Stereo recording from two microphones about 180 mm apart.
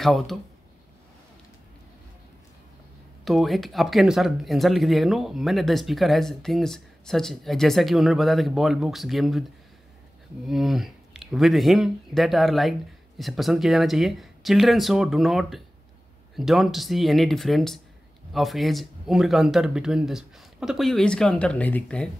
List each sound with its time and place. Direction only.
0.0 s speech: centre (ahead or behind)
3.3 s speech: centre (ahead or behind)
10.4 s speech: centre (ahead or behind)